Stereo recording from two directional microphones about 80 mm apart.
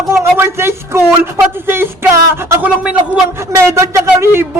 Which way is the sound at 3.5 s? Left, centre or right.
Right.